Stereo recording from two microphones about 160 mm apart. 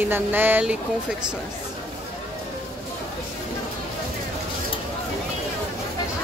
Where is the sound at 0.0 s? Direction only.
10° right (ahead or behind).